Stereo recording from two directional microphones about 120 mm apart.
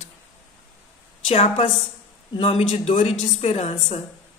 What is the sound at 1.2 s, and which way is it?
A woman's voice, 55° left (ahead or behind).